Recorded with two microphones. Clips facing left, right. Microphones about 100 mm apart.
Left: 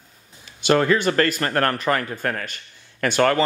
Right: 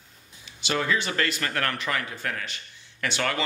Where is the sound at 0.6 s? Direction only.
50° left (ahead or behind).